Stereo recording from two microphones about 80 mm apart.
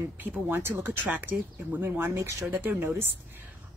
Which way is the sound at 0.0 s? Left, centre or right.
Right.